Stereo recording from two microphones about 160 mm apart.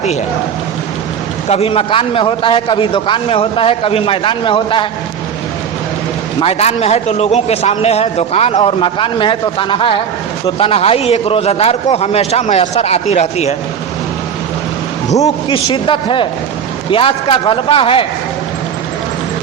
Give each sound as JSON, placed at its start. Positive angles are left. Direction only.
{"t": 1.5, "sound": "a man's voice", "side_deg": 40}
{"t": 6.4, "sound": "a man's voice", "side_deg": 40}
{"t": 15.4, "sound": "a man's voice", "side_deg": 30}